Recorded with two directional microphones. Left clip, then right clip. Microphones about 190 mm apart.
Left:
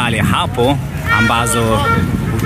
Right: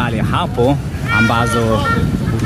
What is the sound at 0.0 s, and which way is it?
Speech, centre (ahead or behind).